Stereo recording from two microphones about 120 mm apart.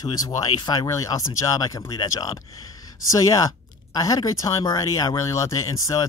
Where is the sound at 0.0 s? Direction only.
35° left (ahead or behind).